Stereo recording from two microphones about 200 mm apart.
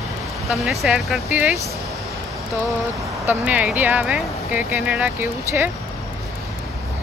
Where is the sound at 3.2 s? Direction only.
5° right (ahead or behind).